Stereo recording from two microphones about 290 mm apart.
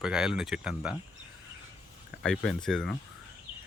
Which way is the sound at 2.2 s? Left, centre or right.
Centre.